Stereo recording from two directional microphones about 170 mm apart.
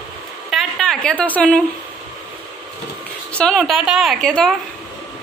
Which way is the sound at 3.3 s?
5° left (ahead or behind).